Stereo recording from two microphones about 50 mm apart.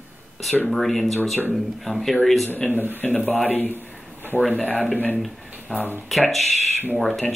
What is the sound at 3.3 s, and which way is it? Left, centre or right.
Speech, left.